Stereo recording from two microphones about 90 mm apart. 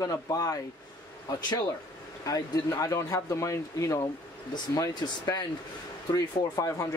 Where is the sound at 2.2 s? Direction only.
40° left (ahead or behind).